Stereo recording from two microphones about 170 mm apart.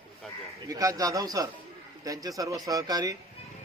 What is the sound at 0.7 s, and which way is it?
A man's voice, 20° right (ahead or behind).